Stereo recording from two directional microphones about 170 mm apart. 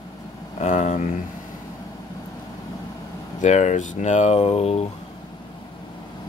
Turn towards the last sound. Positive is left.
turn(degrees=35)  # may be behind; listen again after turning